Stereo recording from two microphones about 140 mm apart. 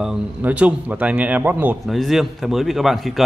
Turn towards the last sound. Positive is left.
turn(degrees=0)  # may be behind; listen again after turning